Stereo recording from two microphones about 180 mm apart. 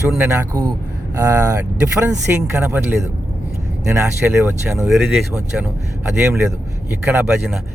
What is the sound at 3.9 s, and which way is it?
Speech, 15° right (ahead or behind).